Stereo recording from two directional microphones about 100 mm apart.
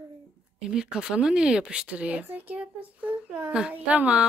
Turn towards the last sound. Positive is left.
turn(degrees=-15)  # may be behind; listen again after turning